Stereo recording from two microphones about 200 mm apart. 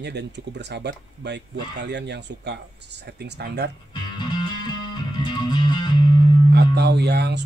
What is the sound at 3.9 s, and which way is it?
Music, 20° left (ahead or behind).